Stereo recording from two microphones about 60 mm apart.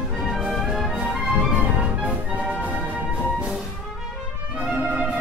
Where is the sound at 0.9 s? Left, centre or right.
Centre.